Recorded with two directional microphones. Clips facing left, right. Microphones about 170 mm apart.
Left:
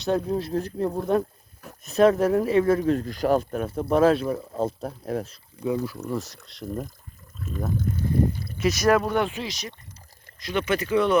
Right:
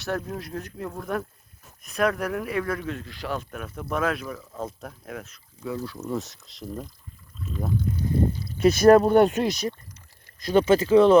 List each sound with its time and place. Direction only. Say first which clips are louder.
0.3 s speech: left 8 dB; 30° left (ahead or behind)
5.6 s speech: left 5 dB; 10° left (ahead or behind)
6.1 s speech: even; centre (ahead or behind)
7.7 s a sound: even; 50° left (ahead or behind)
8.6 s speech: right 6 dB; 35° right (ahead or behind); by 9.6 s 50° right (ahead or behind)
10.4 s speech: right 6 dB; 35° right (ahead or behind)